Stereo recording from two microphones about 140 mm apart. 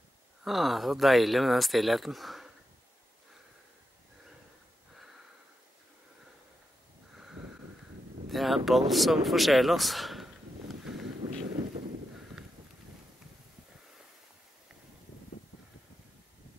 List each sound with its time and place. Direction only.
0.4 s speech: centre (ahead or behind)
8.3 s speech: centre (ahead or behind)
11.2 s vehicle: 55° right (ahead or behind)